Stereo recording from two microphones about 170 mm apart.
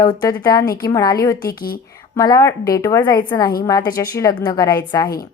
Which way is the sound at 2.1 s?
20° left (ahead or behind).